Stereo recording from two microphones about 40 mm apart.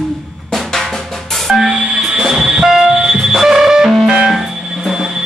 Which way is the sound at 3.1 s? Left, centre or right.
Centre.